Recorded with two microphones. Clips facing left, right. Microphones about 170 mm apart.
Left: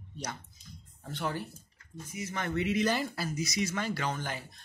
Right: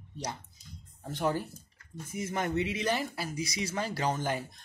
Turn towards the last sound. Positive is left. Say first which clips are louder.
# right 4 dB
turn(degrees=-40)  # may be behind; listen again after turning